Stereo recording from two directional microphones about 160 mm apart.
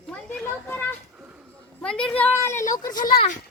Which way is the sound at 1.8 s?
5° left (ahead or behind).